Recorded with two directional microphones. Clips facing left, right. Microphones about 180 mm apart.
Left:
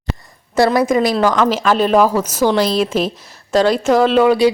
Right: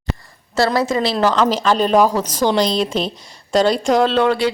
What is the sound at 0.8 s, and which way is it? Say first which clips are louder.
A woman's voice: left 3 dB; 15° left (ahead or behind).